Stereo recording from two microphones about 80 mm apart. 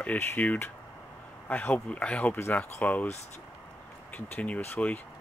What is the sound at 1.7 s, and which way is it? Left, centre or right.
Speech, centre.